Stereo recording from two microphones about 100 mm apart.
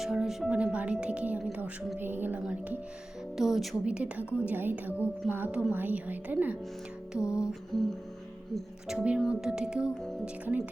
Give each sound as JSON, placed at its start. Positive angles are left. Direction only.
{"t": 0.0, "sound": "speech", "side_deg": -5}
{"t": 7.2, "sound": "music", "side_deg": 30}
{"t": 7.7, "sound": "music", "side_deg": 5}
{"t": 8.5, "sound": "speech", "side_deg": -5}